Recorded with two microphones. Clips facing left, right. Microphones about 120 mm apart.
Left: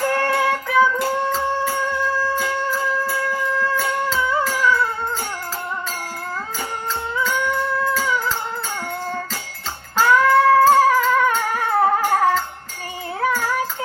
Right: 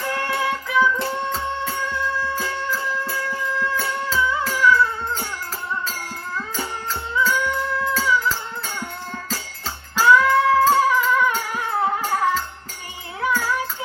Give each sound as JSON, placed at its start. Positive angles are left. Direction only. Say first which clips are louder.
{"t": 0.1, "sound": "music", "louder": "left 4 dB", "side_deg": 45}
{"t": 4.2, "sound": "music", "louder": "right 2 dB", "side_deg": 50}
{"t": 10.0, "sound": "music", "louder": "left 1 dB", "side_deg": 45}